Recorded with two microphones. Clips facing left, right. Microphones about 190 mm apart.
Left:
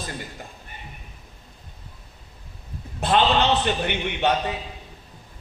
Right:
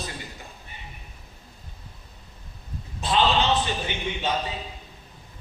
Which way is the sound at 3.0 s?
60° left (ahead or behind).